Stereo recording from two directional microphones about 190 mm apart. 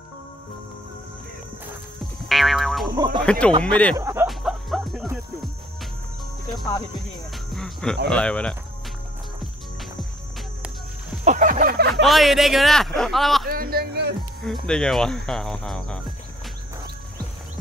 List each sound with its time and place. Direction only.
2.2 s music: centre (ahead or behind)
3.3 s speech: 5° left (ahead or behind)
3.9 s speech: 15° right (ahead or behind)
4.3 s music: centre (ahead or behind)
7.5 s music: 5° left (ahead or behind)
8.1 s speech: 5° left (ahead or behind)
9.4 s music: centre (ahead or behind)
11.2 s a sound: 40° right (ahead or behind)
11.9 s speech: centre (ahead or behind)
13.5 s a sound: 50° right (ahead or behind)
14.4 s speech: 5° left (ahead or behind)